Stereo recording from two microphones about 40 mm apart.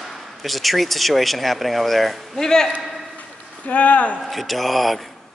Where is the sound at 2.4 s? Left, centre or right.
Centre.